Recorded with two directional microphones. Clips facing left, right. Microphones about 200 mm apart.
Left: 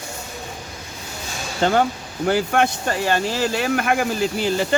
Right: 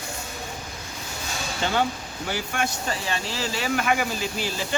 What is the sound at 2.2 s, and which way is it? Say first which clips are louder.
Speech: left 10 dB; 55° left (ahead or behind).